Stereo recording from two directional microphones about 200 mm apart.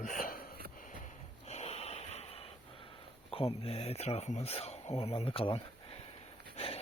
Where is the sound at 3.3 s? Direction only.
30° left (ahead or behind).